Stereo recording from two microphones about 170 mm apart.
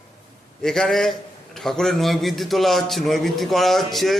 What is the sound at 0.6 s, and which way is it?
A man's voice, centre (ahead or behind).